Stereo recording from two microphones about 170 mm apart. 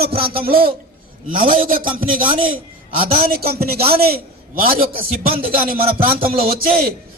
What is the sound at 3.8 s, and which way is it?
Speech, 35° right (ahead or behind).